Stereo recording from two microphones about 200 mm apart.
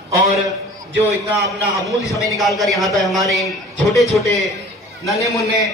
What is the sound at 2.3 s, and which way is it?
A man's voice, centre (ahead or behind).